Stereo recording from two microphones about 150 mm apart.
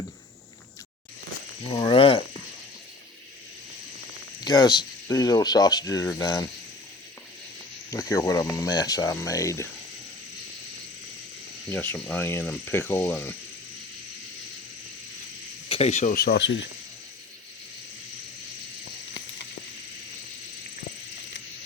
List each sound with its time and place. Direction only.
1.7 s a sound: 35° left (ahead or behind)
4.4 s speech: 25° left (ahead or behind)
7.9 s speech: 20° left (ahead or behind)
11.7 s speech: 10° left (ahead or behind)
15.7 s speech: 45° left (ahead or behind)
16.1 s speech: 90° left